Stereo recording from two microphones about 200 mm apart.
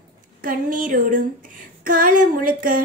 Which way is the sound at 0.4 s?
45° right (ahead or behind).